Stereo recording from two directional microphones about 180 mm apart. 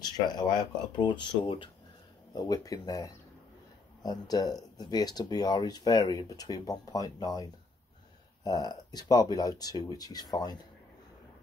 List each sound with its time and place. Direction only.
0.0 s speech: 25° left (ahead or behind)
8.5 s speech: 20° left (ahead or behind)